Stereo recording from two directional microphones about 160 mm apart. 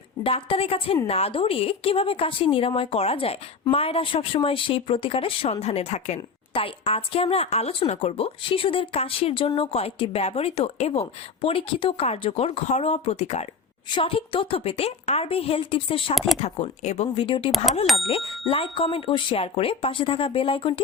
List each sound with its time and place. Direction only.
0.2 s a woman's voice: 35° left (ahead or behind)
16.1 s speech: centre (ahead or behind)
16.4 s a woman's voice: 45° left (ahead or behind)